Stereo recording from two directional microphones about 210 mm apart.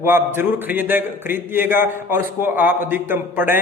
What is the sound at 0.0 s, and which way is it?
A man's voice, 10° right (ahead or behind).